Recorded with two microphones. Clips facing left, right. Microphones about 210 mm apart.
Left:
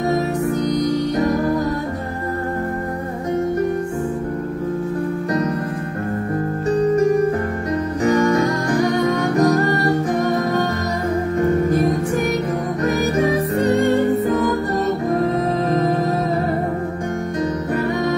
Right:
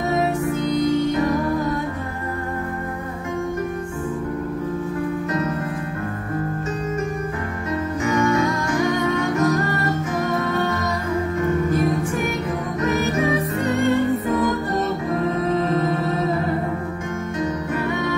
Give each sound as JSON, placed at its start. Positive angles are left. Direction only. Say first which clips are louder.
{"t": 0.1, "sound": "music", "louder": "left 2 dB", "side_deg": 40}
{"t": 8.0, "sound": "music", "louder": "left 4 dB", "side_deg": 35}
{"t": 15.0, "sound": "music", "louder": "left 3 dB", "side_deg": 40}